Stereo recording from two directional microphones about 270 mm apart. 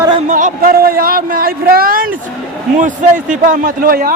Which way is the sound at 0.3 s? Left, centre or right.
Right.